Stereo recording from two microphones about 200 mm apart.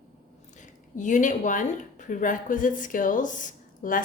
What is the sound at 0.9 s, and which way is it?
Speech, 40° left (ahead or behind).